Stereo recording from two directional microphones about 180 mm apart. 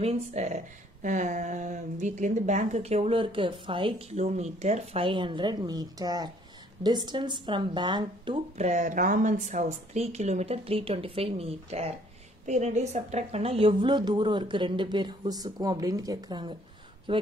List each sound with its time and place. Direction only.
0.0 s a woman's voice: 35° right (ahead or behind)
8.5 s a woman's voice: 40° right (ahead or behind)